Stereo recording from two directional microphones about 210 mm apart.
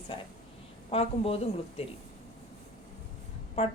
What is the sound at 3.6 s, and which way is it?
Speech, 25° left (ahead or behind).